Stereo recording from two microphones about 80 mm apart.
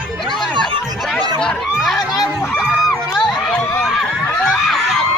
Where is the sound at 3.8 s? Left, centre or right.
Centre.